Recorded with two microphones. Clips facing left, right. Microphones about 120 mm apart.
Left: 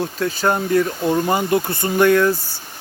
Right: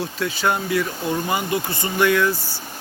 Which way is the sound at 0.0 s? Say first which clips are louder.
Left 3 dB; 45° left (ahead or behind).